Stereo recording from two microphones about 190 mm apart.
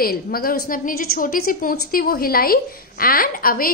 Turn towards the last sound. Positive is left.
turn(degrees=50)  # may be behind; listen again after turning